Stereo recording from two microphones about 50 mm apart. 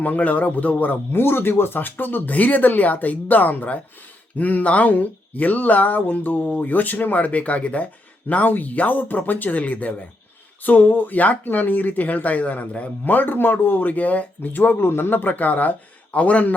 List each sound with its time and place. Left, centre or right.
0.0 s speech: left
1.1 s speech: left
14.8 s a man's voice: left